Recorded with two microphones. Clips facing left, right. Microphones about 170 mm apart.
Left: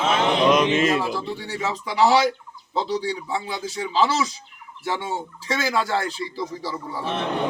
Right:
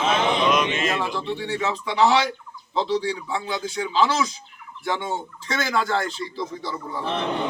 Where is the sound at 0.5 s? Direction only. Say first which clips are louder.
Left 4 dB; 35° left (ahead or behind).